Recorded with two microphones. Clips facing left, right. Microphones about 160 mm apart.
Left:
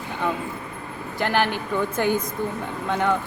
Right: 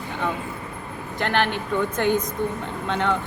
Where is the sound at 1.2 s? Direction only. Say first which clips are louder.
Left 1 dB; 10° left (ahead or behind).